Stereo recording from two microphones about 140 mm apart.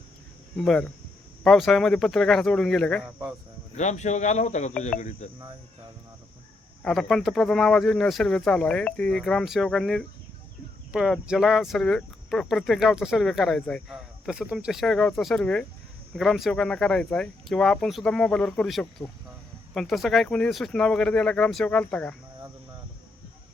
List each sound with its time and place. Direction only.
0.5 s speech: 5° left (ahead or behind)
3.8 s speech: 55° left (ahead or behind)
6.8 s speech: centre (ahead or behind)